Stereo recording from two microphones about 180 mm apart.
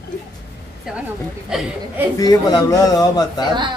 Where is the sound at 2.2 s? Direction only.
20° left (ahead or behind).